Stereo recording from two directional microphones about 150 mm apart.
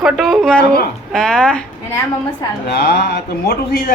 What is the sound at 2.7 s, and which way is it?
Speech, 90° left.